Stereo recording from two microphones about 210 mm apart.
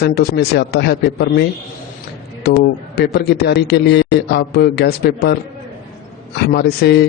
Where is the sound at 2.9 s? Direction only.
50° left (ahead or behind).